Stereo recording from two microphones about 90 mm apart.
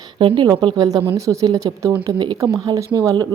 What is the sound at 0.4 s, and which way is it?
Speech, 45° right (ahead or behind).